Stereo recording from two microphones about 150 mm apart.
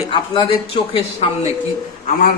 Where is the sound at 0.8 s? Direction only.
40° left (ahead or behind).